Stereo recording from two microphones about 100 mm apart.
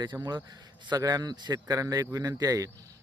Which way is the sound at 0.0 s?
45° right (ahead or behind).